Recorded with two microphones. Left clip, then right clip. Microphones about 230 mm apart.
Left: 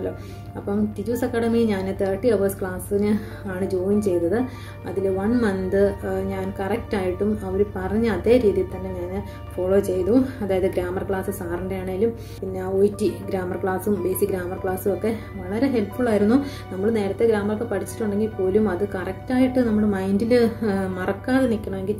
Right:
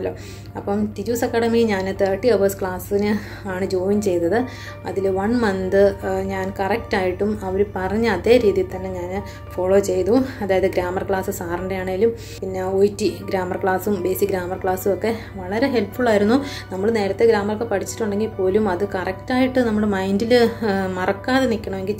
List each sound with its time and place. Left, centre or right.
0.7 s a woman's voice: centre
9.7 s a woman's voice: centre